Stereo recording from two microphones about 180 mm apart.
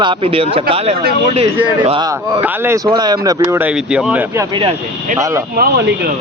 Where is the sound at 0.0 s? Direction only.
30° right (ahead or behind).